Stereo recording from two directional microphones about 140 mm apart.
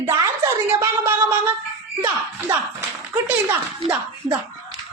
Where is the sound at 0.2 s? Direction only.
20° right (ahead or behind).